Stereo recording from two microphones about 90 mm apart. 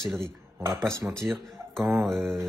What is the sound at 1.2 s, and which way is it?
Speech, 25° right (ahead or behind).